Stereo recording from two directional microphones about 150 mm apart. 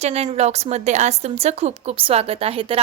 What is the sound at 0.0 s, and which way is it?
Speech, 45° right (ahead or behind).